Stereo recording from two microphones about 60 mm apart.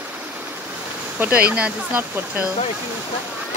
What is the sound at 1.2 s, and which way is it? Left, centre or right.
Speech, right.